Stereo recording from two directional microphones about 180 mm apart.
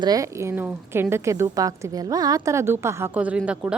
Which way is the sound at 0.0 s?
20° right (ahead or behind).